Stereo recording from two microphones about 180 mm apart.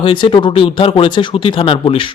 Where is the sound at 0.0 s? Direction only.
30° left (ahead or behind).